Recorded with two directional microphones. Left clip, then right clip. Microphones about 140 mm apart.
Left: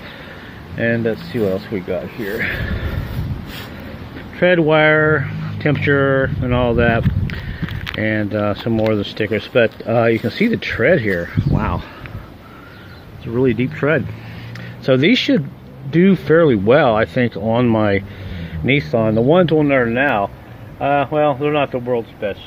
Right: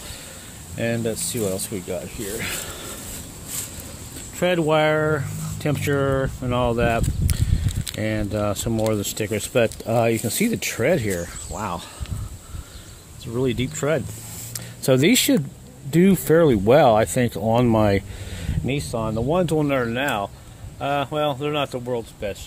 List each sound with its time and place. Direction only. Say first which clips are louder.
0.7 s speech: left 6 dB; 30° right (ahead or behind)
4.4 s speech: left 6 dB; 25° right (ahead or behind)
13.3 s speech: left 7 dB; 25° right (ahead or behind)
14.9 s speech: left 4 dB; 40° right (ahead or behind)
18.8 s speech: left 10 dB; 5° left (ahead or behind)
19.4 s speech: left 7 dB; 25° right (ahead or behind)